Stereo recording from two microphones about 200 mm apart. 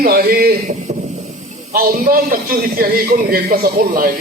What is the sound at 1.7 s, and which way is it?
A man's voice, 45° right (ahead or behind).